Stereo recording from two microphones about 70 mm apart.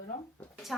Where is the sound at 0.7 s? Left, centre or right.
Centre.